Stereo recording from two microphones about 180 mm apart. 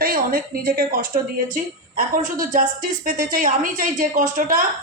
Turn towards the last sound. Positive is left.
turn(degrees=-45)  # may be behind; listen again after turning